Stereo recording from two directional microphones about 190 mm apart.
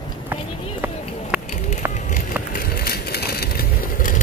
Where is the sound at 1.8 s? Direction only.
15° right (ahead or behind).